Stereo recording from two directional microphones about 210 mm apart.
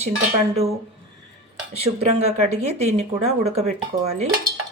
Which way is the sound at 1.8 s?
30° right (ahead or behind).